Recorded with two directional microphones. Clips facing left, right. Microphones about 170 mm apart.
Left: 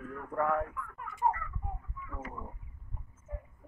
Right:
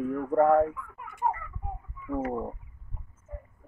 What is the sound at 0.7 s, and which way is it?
Speech, 5° right (ahead or behind).